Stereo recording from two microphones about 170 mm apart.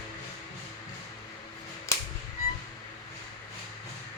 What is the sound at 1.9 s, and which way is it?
Music, 20° left (ahead or behind).